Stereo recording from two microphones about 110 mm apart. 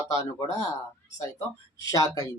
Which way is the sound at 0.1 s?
35° left (ahead or behind).